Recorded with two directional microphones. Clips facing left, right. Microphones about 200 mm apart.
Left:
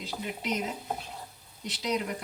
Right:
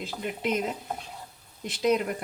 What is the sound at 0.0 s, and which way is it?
Speech, 55° right (ahead or behind).